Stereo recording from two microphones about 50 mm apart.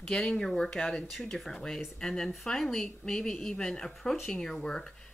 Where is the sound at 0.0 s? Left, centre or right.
Centre.